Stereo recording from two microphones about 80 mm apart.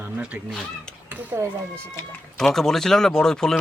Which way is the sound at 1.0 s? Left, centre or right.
Right.